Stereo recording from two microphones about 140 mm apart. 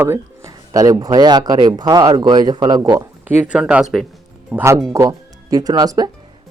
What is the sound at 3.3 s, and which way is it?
Speech, 10° right (ahead or behind).